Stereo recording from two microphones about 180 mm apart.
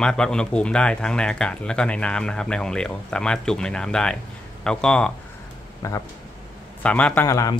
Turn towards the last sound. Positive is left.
turn(degrees=15)  # may be behind; listen again after turning